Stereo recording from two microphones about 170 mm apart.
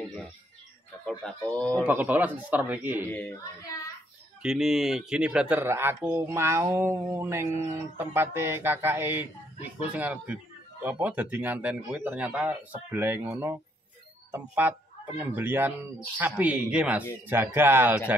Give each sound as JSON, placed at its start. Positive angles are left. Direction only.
{"t": 1.2, "sound": "speech", "side_deg": 5}
{"t": 1.7, "sound": "speech", "side_deg": -10}
{"t": 3.1, "sound": "speech", "side_deg": 10}
{"t": 4.4, "sound": "speech", "side_deg": 0}